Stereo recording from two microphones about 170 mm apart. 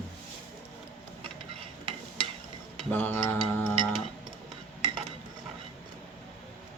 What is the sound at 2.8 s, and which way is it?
Speech, 10° left (ahead or behind).